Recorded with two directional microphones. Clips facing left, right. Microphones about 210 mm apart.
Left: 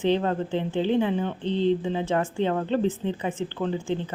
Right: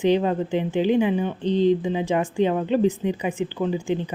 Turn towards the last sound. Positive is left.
turn(degrees=-15)  # may be behind; listen again after turning